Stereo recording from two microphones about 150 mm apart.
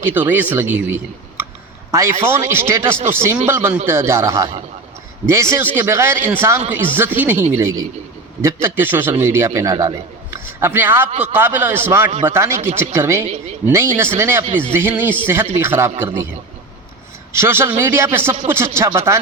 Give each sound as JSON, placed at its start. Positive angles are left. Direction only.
{"t": 0.1, "sound": "a man's voice", "side_deg": -10}
{"t": 17.3, "sound": "a man's voice", "side_deg": -15}